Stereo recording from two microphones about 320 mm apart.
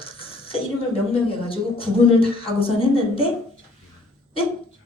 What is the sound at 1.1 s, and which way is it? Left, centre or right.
Speech, centre.